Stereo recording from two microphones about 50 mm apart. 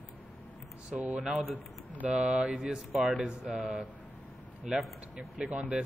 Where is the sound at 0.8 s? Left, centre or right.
Right.